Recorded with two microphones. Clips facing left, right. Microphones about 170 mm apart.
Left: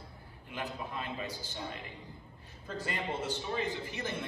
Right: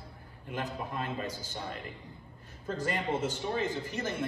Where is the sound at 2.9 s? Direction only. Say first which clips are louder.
Right 4 dB; 45° right (ahead or behind).